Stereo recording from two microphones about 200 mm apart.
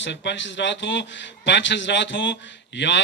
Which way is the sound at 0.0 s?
60° left (ahead or behind).